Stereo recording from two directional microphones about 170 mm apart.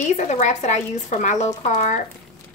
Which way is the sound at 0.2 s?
45° left (ahead or behind).